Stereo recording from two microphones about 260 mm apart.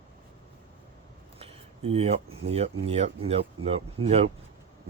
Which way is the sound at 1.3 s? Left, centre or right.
Right.